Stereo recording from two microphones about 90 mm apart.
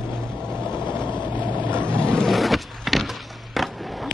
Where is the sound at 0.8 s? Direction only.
60° left (ahead or behind).